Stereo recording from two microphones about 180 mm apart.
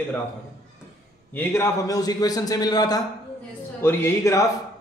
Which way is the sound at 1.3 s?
10° left (ahead or behind).